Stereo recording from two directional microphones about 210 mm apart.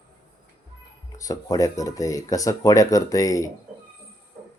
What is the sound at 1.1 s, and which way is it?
Speech, 15° left (ahead or behind).